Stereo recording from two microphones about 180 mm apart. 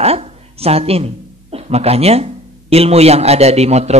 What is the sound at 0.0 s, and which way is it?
A woman's voice, 35° right (ahead or behind).